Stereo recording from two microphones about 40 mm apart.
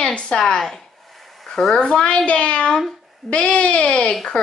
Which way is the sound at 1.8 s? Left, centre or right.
Left.